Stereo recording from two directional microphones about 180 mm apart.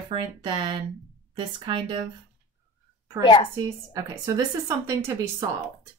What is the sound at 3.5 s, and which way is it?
Speech, 20° right (ahead or behind).